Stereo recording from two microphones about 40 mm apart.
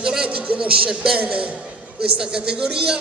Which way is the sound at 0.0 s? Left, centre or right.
Right.